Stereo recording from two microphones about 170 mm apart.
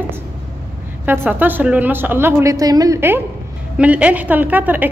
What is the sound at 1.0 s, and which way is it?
A woman's voice, 10° right (ahead or behind).